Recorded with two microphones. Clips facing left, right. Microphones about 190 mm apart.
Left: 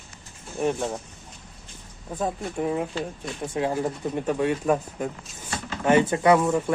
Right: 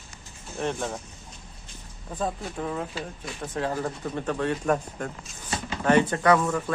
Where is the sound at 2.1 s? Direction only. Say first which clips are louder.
Left 3 dB; 15° left (ahead or behind).